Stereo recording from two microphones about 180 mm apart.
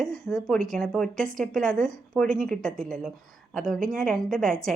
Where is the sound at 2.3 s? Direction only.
50° right (ahead or behind).